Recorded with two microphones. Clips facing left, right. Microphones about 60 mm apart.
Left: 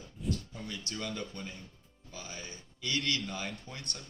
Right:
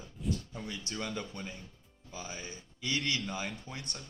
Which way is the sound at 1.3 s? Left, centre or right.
Centre.